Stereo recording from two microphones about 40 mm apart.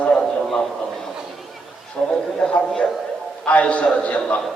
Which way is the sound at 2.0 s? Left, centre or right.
Left.